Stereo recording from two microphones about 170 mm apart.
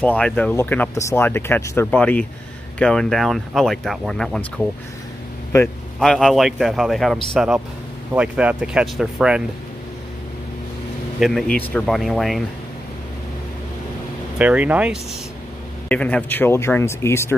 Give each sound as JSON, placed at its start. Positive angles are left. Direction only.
{"t": 0.0, "sound": "speech", "side_deg": 10}
{"t": 5.5, "sound": "speech", "side_deg": 15}
{"t": 5.9, "sound": "speech", "side_deg": 5}
{"t": 11.1, "sound": "a man's voice", "side_deg": 0}
{"t": 14.4, "sound": "speech", "side_deg": -10}
{"t": 15.9, "sound": "speech", "side_deg": 10}